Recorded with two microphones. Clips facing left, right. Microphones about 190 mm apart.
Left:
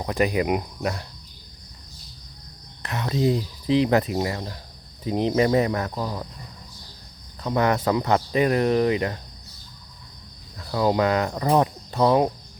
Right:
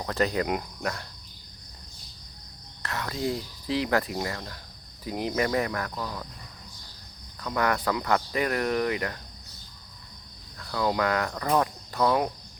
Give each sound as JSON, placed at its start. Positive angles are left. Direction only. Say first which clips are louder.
{"t": 0.0, "sound": "cricket", "louder": "left 4 dB", "side_deg": 15}
{"t": 2.8, "sound": "speech", "louder": "left 7 dB", "side_deg": 20}
{"t": 7.4, "sound": "speech", "louder": "left 5 dB", "side_deg": 25}
{"t": 10.6, "sound": "cricket", "louder": "left 5 dB", "side_deg": 25}